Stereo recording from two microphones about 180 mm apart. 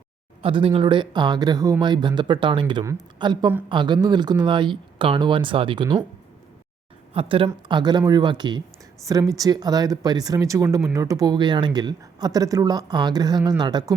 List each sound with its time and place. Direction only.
0.4 s speech: 30° right (ahead or behind)
7.1 s speech: 30° right (ahead or behind)